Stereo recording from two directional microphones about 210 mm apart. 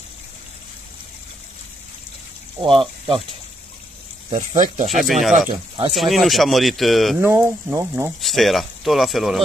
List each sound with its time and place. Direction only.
2.6 s speech: 25° right (ahead or behind)
4.3 s speech: 35° right (ahead or behind)
5.0 s speech: centre (ahead or behind)
7.2 s speech: 10° right (ahead or behind)
8.2 s speech: centre (ahead or behind)